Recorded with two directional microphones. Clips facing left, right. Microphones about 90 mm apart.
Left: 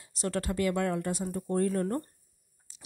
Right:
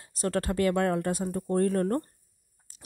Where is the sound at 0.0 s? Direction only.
45° right (ahead or behind).